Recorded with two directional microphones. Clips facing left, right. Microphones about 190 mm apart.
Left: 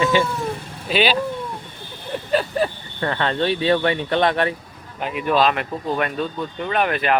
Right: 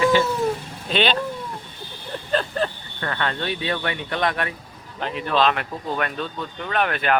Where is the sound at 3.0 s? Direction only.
25° left (ahead or behind).